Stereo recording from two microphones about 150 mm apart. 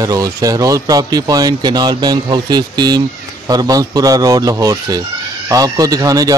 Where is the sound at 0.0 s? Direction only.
25° right (ahead or behind).